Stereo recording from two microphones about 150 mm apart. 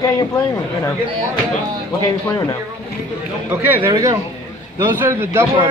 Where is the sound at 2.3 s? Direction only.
20° left (ahead or behind).